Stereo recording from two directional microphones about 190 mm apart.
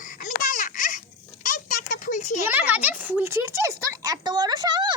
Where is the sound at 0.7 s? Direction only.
40° left (ahead or behind).